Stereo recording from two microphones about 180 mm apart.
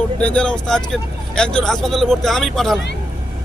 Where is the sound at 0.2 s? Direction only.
5° left (ahead or behind).